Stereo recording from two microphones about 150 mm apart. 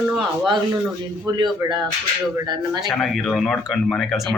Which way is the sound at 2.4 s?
30° right (ahead or behind).